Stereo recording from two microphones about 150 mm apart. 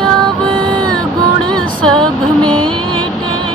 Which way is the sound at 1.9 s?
5° left (ahead or behind).